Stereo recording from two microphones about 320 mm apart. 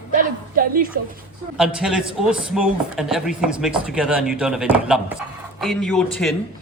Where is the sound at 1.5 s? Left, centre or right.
Centre.